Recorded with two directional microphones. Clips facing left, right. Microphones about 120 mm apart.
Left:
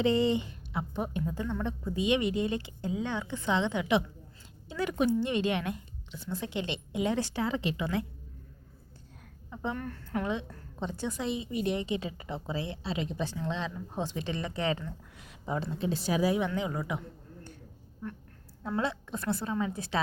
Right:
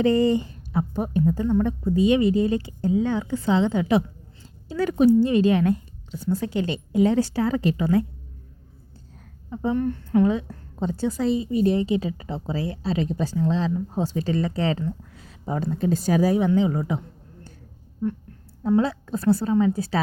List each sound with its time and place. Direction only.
0.0 s a woman's voice: 45° right (ahead or behind)
9.6 s a woman's voice: 25° right (ahead or behind)
10.2 s a woman's voice: 35° right (ahead or behind)
16.5 s a woman's voice: 30° right (ahead or behind)
18.6 s a woman's voice: 30° right (ahead or behind)